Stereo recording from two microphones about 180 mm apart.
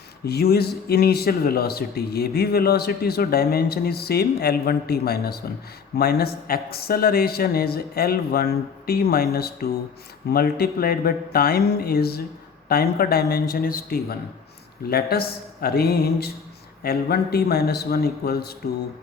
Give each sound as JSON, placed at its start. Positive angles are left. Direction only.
{"t": 0.3, "sound": "speech", "side_deg": 60}